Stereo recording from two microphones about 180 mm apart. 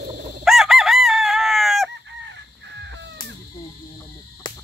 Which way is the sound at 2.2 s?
85° right.